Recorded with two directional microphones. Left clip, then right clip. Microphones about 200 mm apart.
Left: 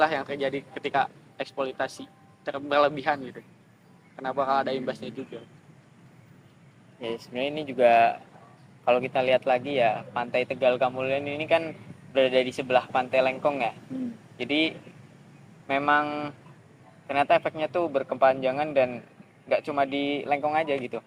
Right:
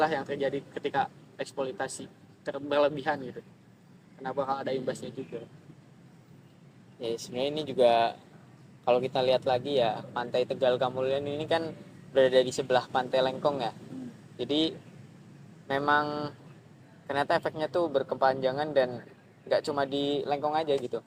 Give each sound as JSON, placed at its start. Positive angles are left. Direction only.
{"t": 0.0, "sound": "speech", "side_deg": -20}
{"t": 4.2, "sound": "speech", "side_deg": -20}
{"t": 7.0, "sound": "speech", "side_deg": -40}
{"t": 15.6, "sound": "speech", "side_deg": -40}